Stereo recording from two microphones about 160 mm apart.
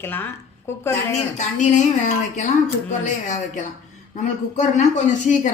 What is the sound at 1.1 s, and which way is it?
Speech, 50° left (ahead or behind).